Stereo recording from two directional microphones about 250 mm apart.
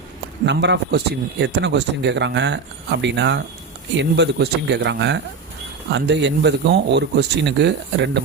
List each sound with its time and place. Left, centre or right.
0.4 s speech: right